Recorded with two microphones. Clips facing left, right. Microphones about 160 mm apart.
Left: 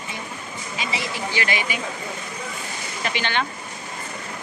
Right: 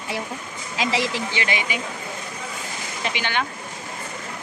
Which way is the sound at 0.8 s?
90° right.